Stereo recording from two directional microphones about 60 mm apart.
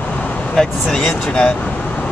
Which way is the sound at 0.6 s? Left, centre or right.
Centre.